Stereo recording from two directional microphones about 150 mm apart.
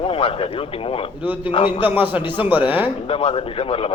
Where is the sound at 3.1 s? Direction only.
40° left (ahead or behind).